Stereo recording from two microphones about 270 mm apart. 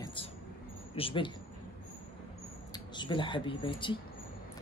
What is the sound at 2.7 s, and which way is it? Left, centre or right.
Speech, centre.